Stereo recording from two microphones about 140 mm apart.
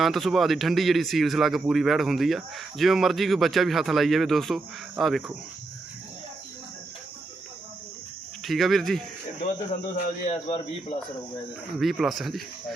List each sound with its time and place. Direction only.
0.0 s speech: centre (ahead or behind)
8.4 s speech: centre (ahead or behind)
9.9 s speech: 55° left (ahead or behind)
11.8 s speech: centre (ahead or behind)